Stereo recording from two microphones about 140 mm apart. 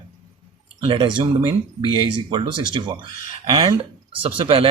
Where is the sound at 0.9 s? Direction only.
35° right (ahead or behind).